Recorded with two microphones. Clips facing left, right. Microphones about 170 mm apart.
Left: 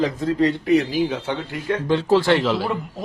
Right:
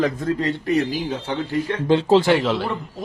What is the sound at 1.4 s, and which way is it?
Speech, 30° right (ahead or behind).